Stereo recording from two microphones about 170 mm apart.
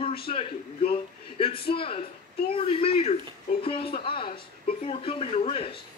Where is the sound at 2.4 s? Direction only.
35° left (ahead or behind).